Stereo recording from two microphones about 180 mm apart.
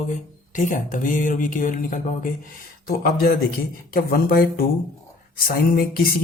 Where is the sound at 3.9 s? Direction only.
50° left (ahead or behind).